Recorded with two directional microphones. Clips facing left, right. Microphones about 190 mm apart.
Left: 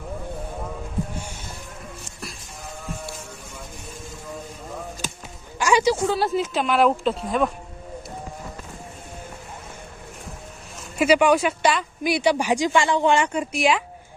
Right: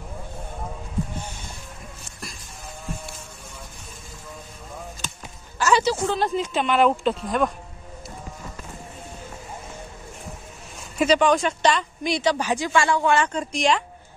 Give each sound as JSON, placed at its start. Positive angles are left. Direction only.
{"t": 5.6, "sound": "speech", "side_deg": 10}
{"t": 11.0, "sound": "speech", "side_deg": 10}